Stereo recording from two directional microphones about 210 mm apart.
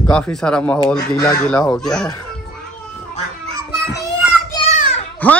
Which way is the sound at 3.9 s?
15° left (ahead or behind).